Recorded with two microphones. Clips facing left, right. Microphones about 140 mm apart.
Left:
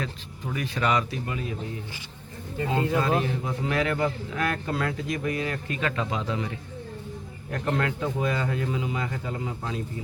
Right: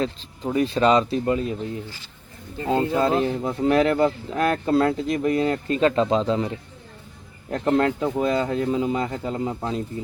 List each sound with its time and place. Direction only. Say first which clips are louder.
0.0 s speech: right 8 dB; 30° right (ahead or behind)
2.7 s a man's voice: right 4 dB; 30° right (ahead or behind)